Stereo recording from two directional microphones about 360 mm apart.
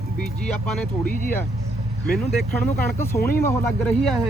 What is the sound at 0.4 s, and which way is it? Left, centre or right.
Speech, centre.